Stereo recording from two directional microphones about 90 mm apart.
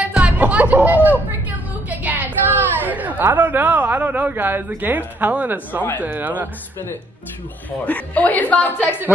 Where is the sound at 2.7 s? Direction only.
20° right (ahead or behind).